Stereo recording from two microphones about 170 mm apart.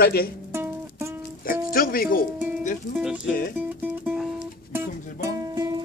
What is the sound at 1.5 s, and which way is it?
Music, 60° left (ahead or behind).